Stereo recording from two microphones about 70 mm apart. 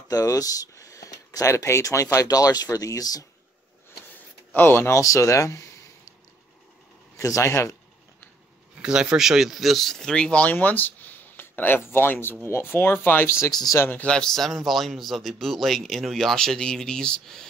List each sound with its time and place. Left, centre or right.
0.1 s speech: left
4.6 s speech: left
7.2 s speech: left
8.8 s speech: centre; by 13.5 s left
13.5 s speech: left
13.7 s speech: left
14.0 s speech: centre